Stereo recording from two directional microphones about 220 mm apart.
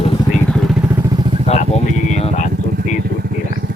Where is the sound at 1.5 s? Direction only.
30° left (ahead or behind).